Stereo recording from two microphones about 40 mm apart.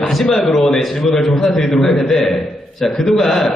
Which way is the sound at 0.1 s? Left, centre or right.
Centre.